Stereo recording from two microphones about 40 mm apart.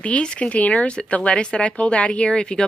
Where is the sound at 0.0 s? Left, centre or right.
Left.